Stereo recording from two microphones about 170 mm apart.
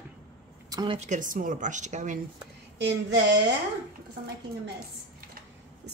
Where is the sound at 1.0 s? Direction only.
45° right (ahead or behind).